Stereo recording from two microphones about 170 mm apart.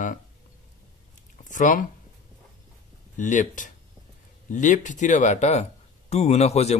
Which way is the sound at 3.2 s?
50° left (ahead or behind).